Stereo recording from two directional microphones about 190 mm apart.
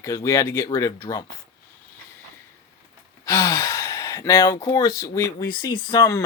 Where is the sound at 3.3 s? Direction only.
15° left (ahead or behind).